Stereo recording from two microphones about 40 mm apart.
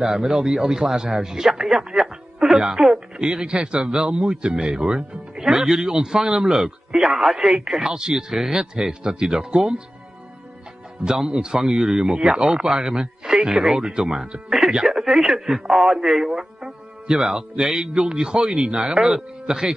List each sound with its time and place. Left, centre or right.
0.0 s a man's voice: centre
3.2 s a man's voice: centre
3.8 s a man's voice: centre
11.0 s a man's voice: centre
14.9 s a man's voice: centre